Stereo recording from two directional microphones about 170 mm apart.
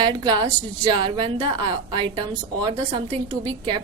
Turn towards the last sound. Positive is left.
turn(degrees=-30)  # may be behind; listen again after turning